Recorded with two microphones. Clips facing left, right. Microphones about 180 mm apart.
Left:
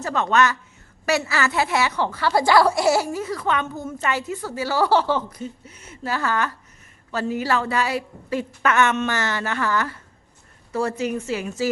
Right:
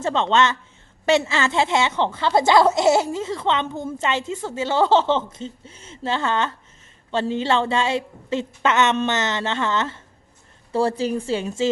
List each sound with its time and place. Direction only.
0.0 s a woman's voice: 25° right (ahead or behind)